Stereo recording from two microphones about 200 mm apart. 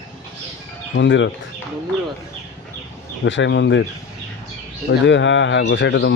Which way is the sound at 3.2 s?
65° left (ahead or behind).